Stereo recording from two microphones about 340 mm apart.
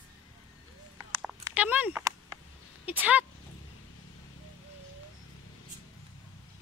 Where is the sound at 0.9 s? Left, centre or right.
Centre.